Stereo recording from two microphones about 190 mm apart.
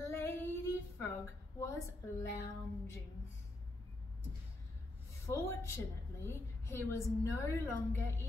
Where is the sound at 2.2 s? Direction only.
15° left (ahead or behind).